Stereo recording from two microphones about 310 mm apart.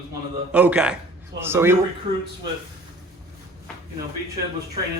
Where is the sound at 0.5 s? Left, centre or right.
Centre.